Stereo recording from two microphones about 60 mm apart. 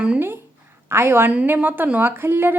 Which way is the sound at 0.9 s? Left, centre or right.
Right.